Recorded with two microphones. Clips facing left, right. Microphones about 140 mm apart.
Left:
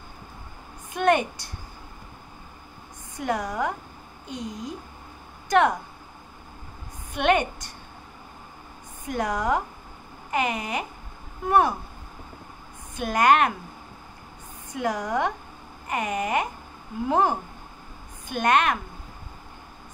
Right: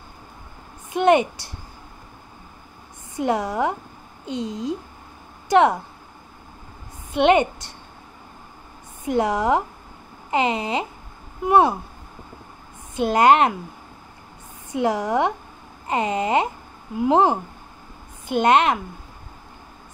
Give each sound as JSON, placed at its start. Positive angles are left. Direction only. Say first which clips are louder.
{"t": 0.9, "sound": "speech", "louder": "right 5 dB", "side_deg": -20}
{"t": 3.2, "sound": "speech", "louder": "right 5 dB", "side_deg": -25}
{"t": 7.2, "sound": "speech", "louder": "right 5 dB", "side_deg": -25}
{"t": 9.0, "sound": "speech", "louder": "right 6 dB", "side_deg": -25}
{"t": 12.9, "sound": "speech", "louder": "right 4 dB", "side_deg": -25}
{"t": 14.7, "sound": "speech", "louder": "right 5 dB", "side_deg": -25}